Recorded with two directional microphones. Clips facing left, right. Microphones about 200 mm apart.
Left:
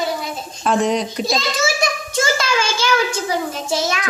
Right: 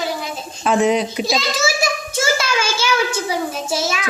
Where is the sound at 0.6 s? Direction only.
5° right (ahead or behind).